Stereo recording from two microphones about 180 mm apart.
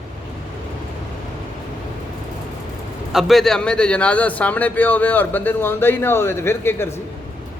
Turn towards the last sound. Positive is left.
turn(degrees=15)  # may be behind; listen again after turning